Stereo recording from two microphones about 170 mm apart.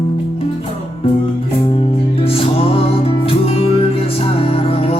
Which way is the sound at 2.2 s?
35° left (ahead or behind).